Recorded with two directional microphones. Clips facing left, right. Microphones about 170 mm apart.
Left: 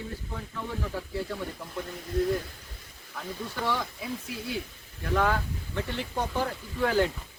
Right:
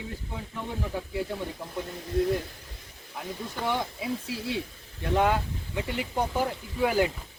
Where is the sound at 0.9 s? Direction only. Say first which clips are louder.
Right 2 dB; 15° right (ahead or behind).